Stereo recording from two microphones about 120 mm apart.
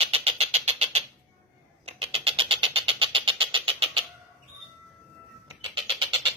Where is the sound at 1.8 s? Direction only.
55° right (ahead or behind).